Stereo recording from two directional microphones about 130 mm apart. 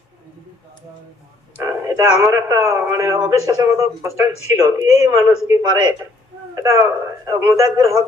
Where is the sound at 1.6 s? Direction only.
25° right (ahead or behind).